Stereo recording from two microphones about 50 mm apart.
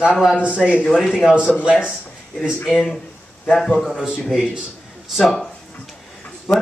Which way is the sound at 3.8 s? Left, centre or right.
Centre.